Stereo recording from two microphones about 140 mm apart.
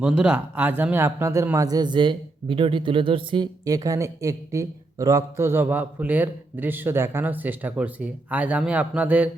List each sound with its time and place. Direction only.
0.0 s speech: 10° right (ahead or behind)